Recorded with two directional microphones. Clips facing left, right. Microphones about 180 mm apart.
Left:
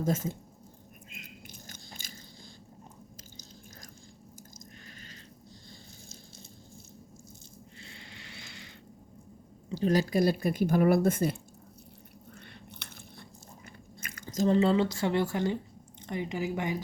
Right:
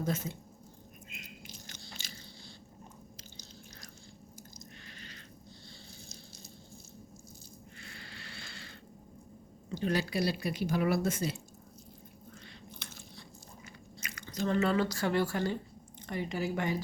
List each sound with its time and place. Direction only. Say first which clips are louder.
0.0 s speech: left 4 dB; 45° left (ahead or behind)
1.5 s biting: left 1 dB; 45° left (ahead or behind)
7.8 s a sound: even; 25° left (ahead or behind)
9.7 s speech: left 6 dB; 40° left (ahead or behind)
12.3 s biting: left 2 dB; 65° left (ahead or behind)
14.0 s chewing: left 6 dB; 45° left (ahead or behind)
14.5 s speech: left 3 dB; 25° left (ahead or behind)